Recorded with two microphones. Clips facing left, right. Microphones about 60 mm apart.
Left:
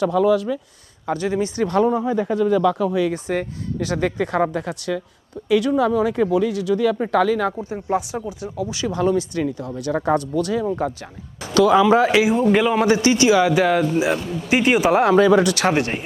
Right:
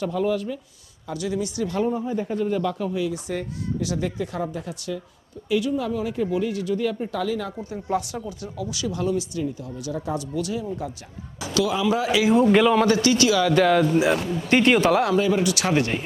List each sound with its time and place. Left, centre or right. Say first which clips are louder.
0.0 s speech: left 7 dB; left
1.0 s speech: left 5 dB; left
1.8 s speech: left 5 dB; left
3.1 s speech: left 5 dB; left
7.6 s speech: left 3 dB; left
12.3 s speech: even; centre
12.7 s speech: left 2 dB; centre
13.5 s speech: even; centre
14.8 s speech: left 4 dB; left
15.1 s speech: left 6 dB; left
15.7 s speech: left 1 dB; left